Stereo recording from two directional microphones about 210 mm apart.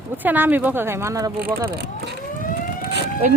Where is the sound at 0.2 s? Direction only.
10° right (ahead or behind).